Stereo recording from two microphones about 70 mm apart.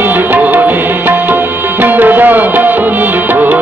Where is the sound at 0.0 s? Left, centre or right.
Right.